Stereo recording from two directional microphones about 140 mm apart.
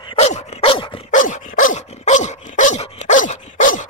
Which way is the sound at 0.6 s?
40° left (ahead or behind).